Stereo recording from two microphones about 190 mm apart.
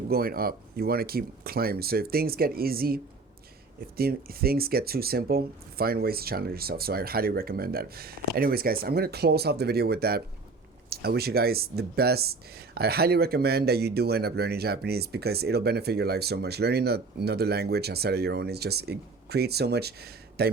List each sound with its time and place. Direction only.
0.1 s speech: 55° right (ahead or behind)